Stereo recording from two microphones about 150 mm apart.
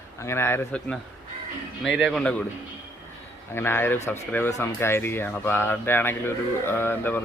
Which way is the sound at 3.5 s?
15° left (ahead or behind).